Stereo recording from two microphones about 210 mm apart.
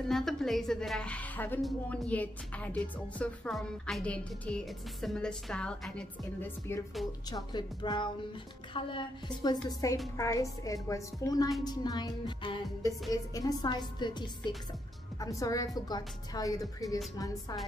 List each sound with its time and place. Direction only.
0.1 s a woman's voice: centre (ahead or behind)